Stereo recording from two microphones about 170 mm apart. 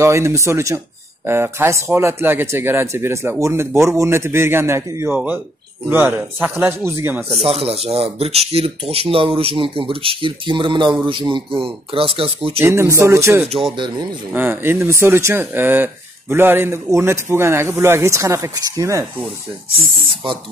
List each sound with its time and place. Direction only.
0.0 s speech: 15° right (ahead or behind)
7.4 s speech: 35° right (ahead or behind)
12.5 s speech: 15° right (ahead or behind)
13.7 s speech: 25° right (ahead or behind)
14.3 s speech: 15° right (ahead or behind)